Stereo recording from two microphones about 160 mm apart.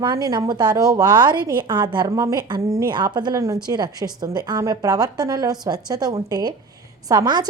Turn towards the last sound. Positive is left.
turn(degrees=-25)  # may be behind; listen again after turning